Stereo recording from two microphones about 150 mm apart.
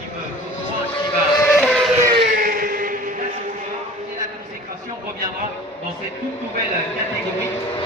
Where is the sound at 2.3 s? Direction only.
75° right (ahead or behind).